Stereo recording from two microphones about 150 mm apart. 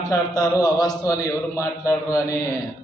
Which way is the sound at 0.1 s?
25° left (ahead or behind).